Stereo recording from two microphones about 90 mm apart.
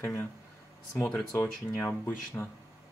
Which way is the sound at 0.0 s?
20° left (ahead or behind).